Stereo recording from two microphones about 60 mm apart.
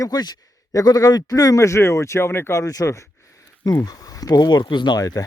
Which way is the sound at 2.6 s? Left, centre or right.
Left.